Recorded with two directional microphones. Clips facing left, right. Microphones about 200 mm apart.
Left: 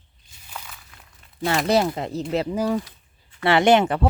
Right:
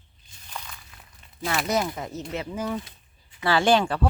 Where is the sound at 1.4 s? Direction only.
30° left (ahead or behind).